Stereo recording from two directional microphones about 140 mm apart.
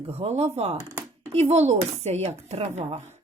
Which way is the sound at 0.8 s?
20° right (ahead or behind).